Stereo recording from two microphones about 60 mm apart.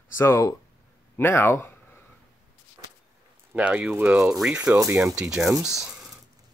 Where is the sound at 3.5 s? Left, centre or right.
Right.